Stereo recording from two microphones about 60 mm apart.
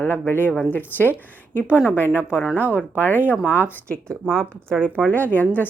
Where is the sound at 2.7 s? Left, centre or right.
Left.